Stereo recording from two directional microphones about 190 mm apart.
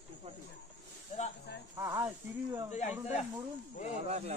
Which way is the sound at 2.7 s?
35° left (ahead or behind).